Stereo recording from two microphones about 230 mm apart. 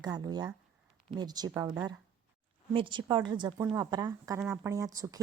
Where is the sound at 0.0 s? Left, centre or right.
Centre.